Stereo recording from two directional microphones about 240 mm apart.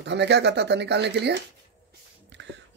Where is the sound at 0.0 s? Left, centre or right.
Right.